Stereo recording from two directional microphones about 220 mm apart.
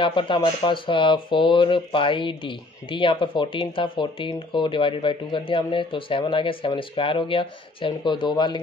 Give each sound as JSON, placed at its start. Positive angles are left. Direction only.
{"t": 0.0, "sound": "speech", "side_deg": 20}